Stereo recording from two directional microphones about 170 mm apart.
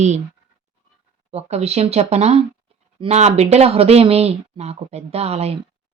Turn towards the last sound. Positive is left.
turn(degrees=-35)  # may be behind; listen again after turning